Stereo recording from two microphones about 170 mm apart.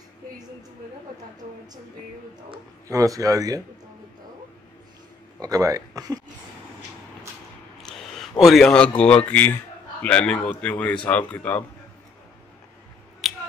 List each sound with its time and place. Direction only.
2.9 s speech: 20° right (ahead or behind)
5.4 s speech: 20° right (ahead or behind)
7.8 s speech: centre (ahead or behind)
13.2 s a sound: centre (ahead or behind)